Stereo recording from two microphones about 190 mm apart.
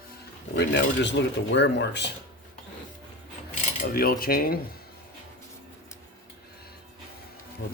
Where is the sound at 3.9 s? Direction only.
50° left (ahead or behind).